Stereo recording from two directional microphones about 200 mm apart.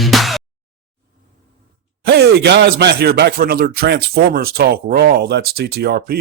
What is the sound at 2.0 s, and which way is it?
Speech, 55° right (ahead or behind).